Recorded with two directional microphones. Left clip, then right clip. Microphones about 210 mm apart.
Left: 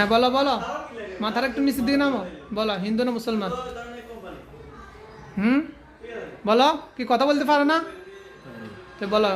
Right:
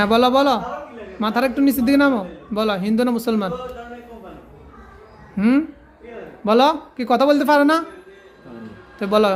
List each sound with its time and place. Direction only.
0.0 s a man's voice: 25° right (ahead or behind)
5.4 s speech: 15° right (ahead or behind)
9.0 s a man's voice: 25° right (ahead or behind)